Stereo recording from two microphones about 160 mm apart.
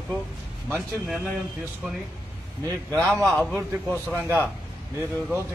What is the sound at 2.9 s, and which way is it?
A man's voice, 5° left (ahead or behind).